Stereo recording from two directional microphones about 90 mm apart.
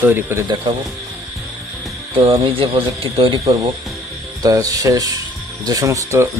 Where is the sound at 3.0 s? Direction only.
75° right (ahead or behind).